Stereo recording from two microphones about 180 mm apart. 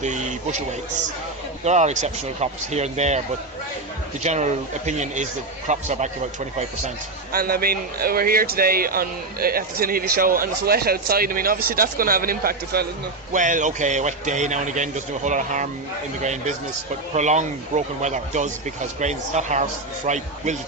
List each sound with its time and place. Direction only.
0.0 s speech: 40° right (ahead or behind)
1.6 s speech: 40° right (ahead or behind)
4.2 s speech: 40° right (ahead or behind)
7.3 s speech: 55° right (ahead or behind)
13.3 s a man's voice: 45° right (ahead or behind)